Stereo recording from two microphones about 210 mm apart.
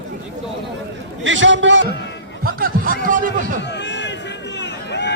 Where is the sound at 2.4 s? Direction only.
45° right (ahead or behind).